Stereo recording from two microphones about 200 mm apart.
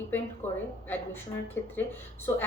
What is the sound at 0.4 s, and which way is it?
Speech, 35° left (ahead or behind).